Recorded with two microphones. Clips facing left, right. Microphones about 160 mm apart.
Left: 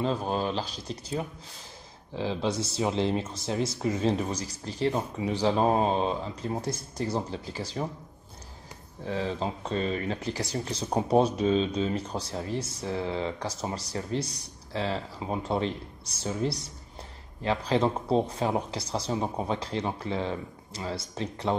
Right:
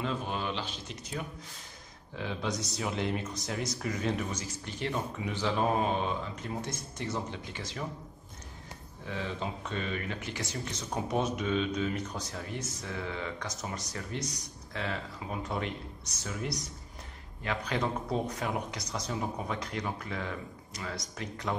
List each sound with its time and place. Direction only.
0.0 s speech: 35° left (ahead or behind)
9.0 s speech: 35° left (ahead or behind)